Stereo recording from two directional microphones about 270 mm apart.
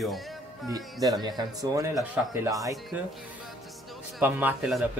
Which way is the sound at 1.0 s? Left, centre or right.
Centre.